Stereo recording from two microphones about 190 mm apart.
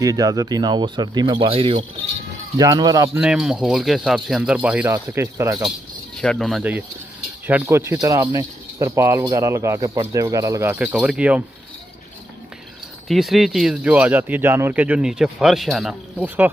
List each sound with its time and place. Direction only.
0.0 s speech: 20° right (ahead or behind)
3.2 s speech: 5° right (ahead or behind)
6.2 s speech: centre (ahead or behind)
13.1 s speech: centre (ahead or behind)